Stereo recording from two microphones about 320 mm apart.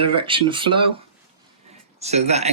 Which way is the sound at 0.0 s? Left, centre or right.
Centre.